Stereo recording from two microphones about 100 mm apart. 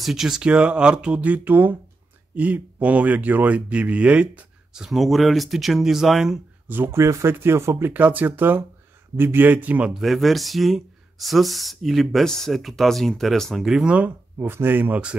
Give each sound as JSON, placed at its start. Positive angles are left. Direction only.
{"t": 0.0, "sound": "speech", "side_deg": -5}
{"t": 6.7, "sound": "speech", "side_deg": -25}
{"t": 14.4, "sound": "speech", "side_deg": -20}